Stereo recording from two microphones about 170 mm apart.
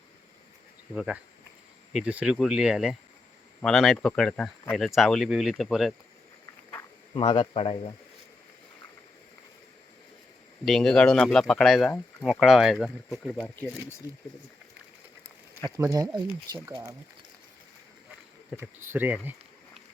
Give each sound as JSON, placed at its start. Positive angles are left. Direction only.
{"t": 0.9, "sound": "speech", "side_deg": -5}
{"t": 6.4, "sound": "a sound", "side_deg": 15}
{"t": 7.1, "sound": "speech", "side_deg": 25}
{"t": 10.7, "sound": "speech", "side_deg": 5}
{"t": 14.0, "sound": "speech", "side_deg": -15}
{"t": 15.8, "sound": "speech", "side_deg": -20}
{"t": 18.5, "sound": "speech", "side_deg": -15}